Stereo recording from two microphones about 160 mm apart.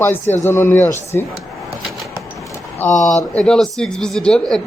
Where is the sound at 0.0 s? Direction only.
15° left (ahead or behind).